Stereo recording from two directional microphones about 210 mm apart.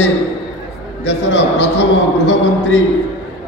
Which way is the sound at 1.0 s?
55° left (ahead or behind).